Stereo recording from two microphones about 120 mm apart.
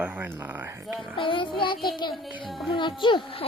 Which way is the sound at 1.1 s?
45° left (ahead or behind).